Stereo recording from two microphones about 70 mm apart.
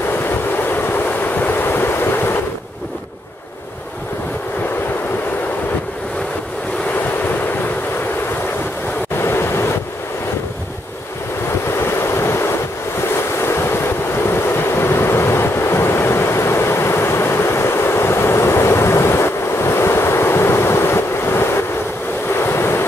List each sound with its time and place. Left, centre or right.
0.2 s train: left
9.1 s waves: left
11.7 s waves: left
13.1 s wind: left
22.3 s waves: left